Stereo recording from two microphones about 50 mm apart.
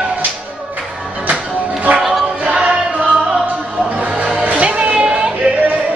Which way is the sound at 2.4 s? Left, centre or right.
Right.